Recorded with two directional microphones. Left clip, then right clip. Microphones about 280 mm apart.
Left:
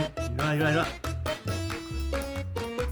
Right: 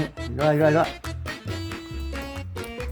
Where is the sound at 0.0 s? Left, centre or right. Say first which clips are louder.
Right 6 dB; centre.